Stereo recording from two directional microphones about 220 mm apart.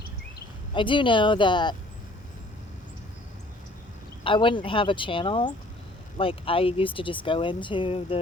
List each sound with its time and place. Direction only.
0.7 s speech: 20° left (ahead or behind)
4.2 s speech: 20° left (ahead or behind)